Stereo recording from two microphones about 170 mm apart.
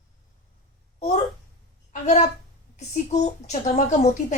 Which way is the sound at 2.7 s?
45° left (ahead or behind).